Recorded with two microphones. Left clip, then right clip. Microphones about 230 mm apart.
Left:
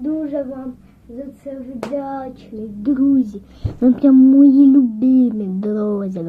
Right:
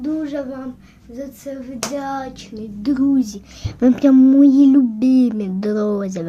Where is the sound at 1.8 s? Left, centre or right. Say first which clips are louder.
Even; right.